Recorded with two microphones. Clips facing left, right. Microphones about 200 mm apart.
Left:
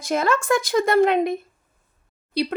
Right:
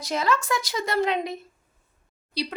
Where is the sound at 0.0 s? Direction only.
50° left (ahead or behind).